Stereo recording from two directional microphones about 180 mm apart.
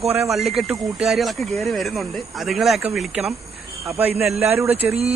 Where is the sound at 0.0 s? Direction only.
5° right (ahead or behind).